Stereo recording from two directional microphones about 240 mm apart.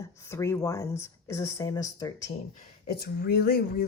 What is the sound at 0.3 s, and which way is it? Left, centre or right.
Speech, centre.